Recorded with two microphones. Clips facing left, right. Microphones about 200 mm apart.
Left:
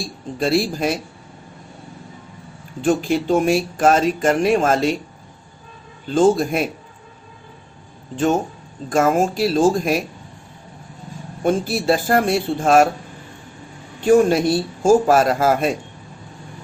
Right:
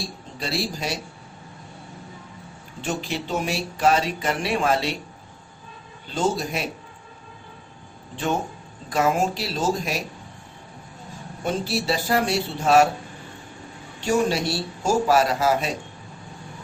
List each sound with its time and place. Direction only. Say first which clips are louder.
0.3 s speech: left 9 dB; 50° left (ahead or behind)
2.8 s speech: left 10 dB; 50° left (ahead or behind)
6.1 s speech: left 9 dB; 50° left (ahead or behind)
8.1 s speech: left 7 dB; 45° left (ahead or behind)
11.4 s speech: left 7 dB; 50° left (ahead or behind)
14.0 s speech: left 8 dB; 50° left (ahead or behind)